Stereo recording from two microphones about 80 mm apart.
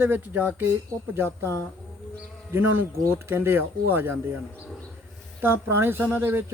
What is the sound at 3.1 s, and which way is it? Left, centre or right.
Speech, right.